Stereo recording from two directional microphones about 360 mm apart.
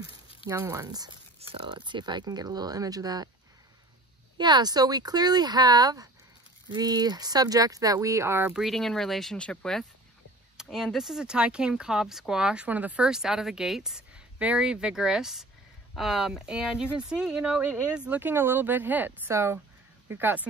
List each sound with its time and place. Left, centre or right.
0.5 s speech: centre
4.4 s speech: centre